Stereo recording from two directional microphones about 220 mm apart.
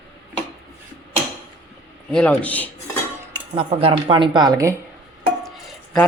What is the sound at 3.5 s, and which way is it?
A woman's voice, 25° right (ahead or behind).